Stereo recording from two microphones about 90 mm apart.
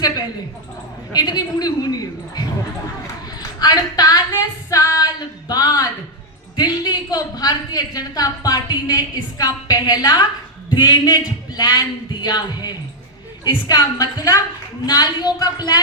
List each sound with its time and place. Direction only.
0.0 s a woman's voice: 45° left (ahead or behind)
3.3 s female singing: 50° left (ahead or behind)
6.6 s a woman's voice: 50° left (ahead or behind)